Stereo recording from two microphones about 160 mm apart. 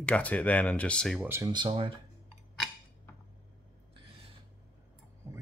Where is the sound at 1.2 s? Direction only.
15° right (ahead or behind).